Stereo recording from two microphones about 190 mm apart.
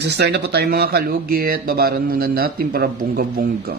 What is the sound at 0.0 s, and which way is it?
Speech, 65° right (ahead or behind).